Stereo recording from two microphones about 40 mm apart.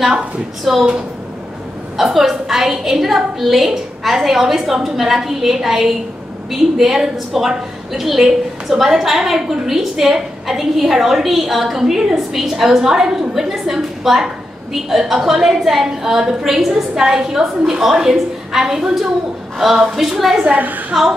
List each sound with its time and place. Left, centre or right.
0.7 s a woman's voice: centre
2.0 s a woman's voice: centre
20.5 s a woman's voice: right